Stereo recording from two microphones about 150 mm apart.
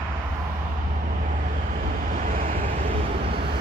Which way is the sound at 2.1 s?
65° right (ahead or behind).